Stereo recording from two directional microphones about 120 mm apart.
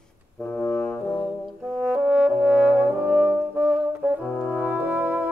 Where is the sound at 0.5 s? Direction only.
10° left (ahead or behind).